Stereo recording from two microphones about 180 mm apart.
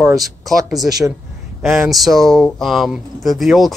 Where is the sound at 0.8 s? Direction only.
20° right (ahead or behind).